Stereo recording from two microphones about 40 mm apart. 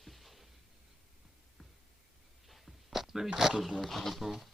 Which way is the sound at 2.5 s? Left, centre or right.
Centre.